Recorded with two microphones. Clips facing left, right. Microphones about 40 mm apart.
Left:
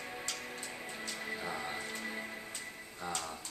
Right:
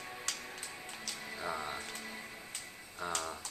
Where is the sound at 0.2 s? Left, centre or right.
Centre.